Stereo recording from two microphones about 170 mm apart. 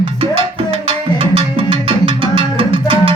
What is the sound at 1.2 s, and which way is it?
Music, 35° right (ahead or behind).